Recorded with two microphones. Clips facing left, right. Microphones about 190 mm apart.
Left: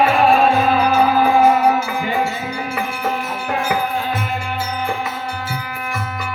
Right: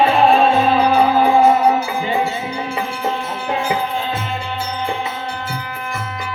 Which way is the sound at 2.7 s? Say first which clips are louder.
Even; 25° right (ahead or behind).